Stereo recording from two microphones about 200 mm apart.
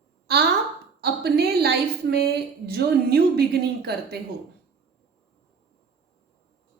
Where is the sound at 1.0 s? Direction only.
55° right (ahead or behind).